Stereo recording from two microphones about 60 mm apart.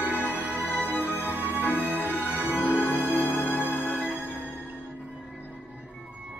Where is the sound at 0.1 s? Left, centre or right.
Left.